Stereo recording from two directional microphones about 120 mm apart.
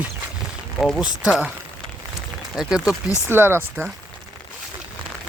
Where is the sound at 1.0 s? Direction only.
5° right (ahead or behind).